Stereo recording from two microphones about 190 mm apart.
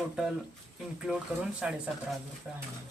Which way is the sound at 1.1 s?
Centre (ahead or behind).